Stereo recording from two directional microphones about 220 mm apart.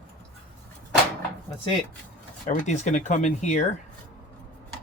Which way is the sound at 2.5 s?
35° left (ahead or behind).